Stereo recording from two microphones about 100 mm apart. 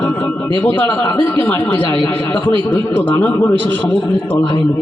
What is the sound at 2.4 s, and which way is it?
A man's voice, 20° left (ahead or behind).